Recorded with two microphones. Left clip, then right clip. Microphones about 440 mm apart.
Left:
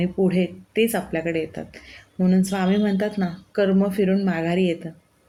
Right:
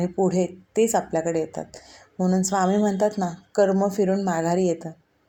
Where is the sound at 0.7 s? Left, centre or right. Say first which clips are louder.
Right 1 dB; left.